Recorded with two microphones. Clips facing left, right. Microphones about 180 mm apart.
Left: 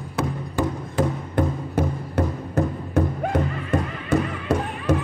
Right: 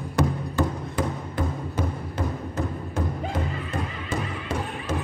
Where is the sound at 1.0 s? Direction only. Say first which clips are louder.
Left 6 dB; 60° left (ahead or behind).